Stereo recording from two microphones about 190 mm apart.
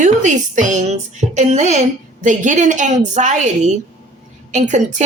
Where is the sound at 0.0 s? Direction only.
40° right (ahead or behind).